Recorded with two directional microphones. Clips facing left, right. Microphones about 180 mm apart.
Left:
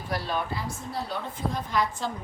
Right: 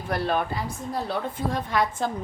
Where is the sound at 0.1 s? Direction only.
55° right (ahead or behind).